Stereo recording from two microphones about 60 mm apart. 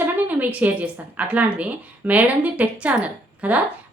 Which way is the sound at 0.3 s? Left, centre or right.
Right.